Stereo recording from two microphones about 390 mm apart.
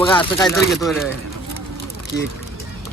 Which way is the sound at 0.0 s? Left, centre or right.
Centre.